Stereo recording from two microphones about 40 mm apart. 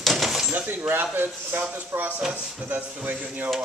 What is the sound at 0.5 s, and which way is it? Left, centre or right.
Speech, right.